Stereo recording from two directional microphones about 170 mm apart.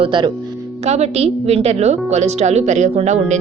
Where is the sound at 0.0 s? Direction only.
30° right (ahead or behind).